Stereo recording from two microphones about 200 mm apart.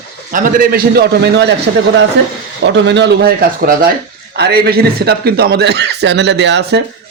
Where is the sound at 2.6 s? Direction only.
60° right (ahead or behind).